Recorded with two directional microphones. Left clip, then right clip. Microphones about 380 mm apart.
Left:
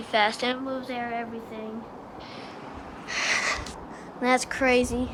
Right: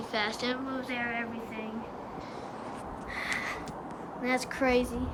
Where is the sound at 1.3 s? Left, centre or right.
Centre.